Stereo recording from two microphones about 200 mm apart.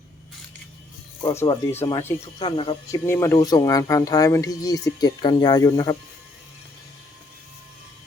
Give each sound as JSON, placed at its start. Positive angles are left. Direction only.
{"t": 1.4, "sound": "speech", "side_deg": 10}
{"t": 2.4, "sound": "speech", "side_deg": 25}
{"t": 2.9, "sound": "speech", "side_deg": 15}